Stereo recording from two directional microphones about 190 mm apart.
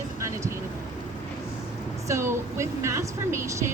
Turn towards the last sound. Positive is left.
turn(degrees=-15)  # may be behind; listen again after turning